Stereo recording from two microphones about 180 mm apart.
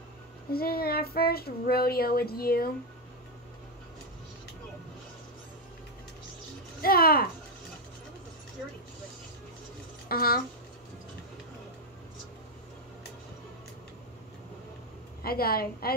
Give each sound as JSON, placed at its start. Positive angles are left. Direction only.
{"t": 0.5, "sound": "speech", "side_deg": 60}
{"t": 6.8, "sound": "speech", "side_deg": 55}
{"t": 10.0, "sound": "speech", "side_deg": 55}
{"t": 15.2, "sound": "speech", "side_deg": 55}